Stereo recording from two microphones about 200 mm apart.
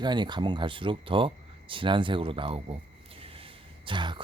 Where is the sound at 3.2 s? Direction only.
25° right (ahead or behind).